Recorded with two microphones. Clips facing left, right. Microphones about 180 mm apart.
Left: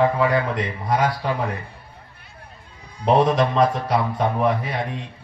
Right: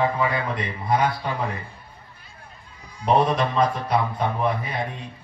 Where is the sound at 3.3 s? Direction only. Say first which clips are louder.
Left 3 dB; 90° left.